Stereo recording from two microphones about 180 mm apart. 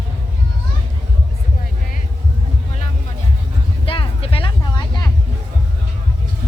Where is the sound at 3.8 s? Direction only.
30° left (ahead or behind).